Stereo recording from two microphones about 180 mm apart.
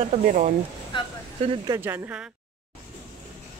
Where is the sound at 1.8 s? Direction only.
10° right (ahead or behind).